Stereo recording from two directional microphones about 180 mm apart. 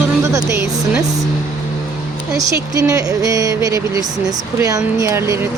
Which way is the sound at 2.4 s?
20° right (ahead or behind).